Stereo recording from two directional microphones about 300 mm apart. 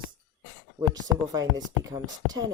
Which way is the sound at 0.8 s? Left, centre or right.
Centre.